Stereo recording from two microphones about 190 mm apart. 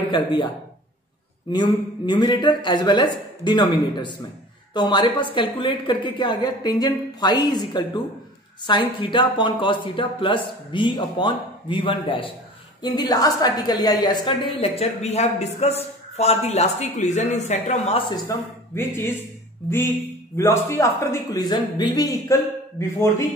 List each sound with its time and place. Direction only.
0.1 s speech: 25° left (ahead or behind)
1.5 s a woman's voice: 20° left (ahead or behind)
18.1 s a man's voice: 15° left (ahead or behind)
20.3 s a man's voice: 15° left (ahead or behind)